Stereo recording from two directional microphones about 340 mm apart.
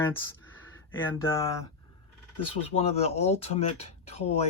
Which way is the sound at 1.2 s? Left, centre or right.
Centre.